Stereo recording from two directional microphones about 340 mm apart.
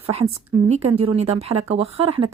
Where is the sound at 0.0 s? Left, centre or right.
Centre.